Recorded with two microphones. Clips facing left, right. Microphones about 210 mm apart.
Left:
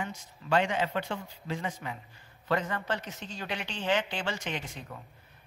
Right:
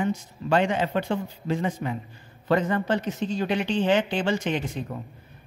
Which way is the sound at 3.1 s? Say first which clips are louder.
Right 14 dB; 55° right (ahead or behind).